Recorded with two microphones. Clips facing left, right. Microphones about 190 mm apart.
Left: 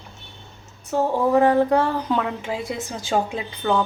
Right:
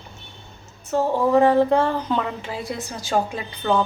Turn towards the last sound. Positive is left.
turn(degrees=5)  # may be behind; listen again after turning